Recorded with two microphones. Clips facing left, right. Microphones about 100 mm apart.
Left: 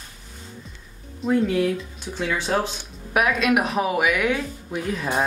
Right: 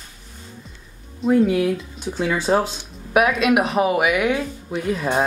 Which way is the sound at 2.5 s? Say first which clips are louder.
Right 5 dB; 20° right (ahead or behind).